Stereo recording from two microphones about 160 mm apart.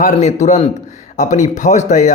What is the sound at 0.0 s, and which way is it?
Speech, 50° left (ahead or behind).